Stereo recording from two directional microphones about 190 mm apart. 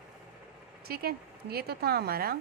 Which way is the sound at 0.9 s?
55° right (ahead or behind).